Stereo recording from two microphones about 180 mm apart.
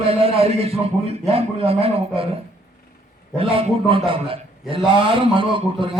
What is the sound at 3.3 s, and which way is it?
A man's voice, 30° right (ahead or behind).